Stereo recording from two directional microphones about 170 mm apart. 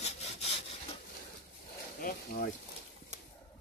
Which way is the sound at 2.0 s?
55° left (ahead or behind).